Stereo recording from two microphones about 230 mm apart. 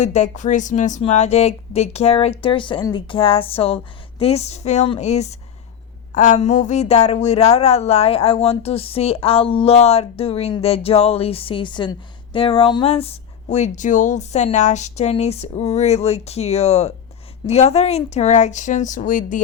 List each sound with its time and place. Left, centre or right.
0.0 s speech: left